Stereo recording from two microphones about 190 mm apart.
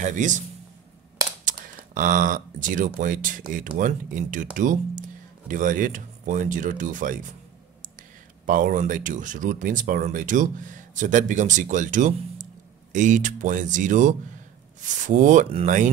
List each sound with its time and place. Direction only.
0.0 s speech: 40° right (ahead or behind)
1.4 s speech: 45° right (ahead or behind)
8.5 s speech: 45° right (ahead or behind)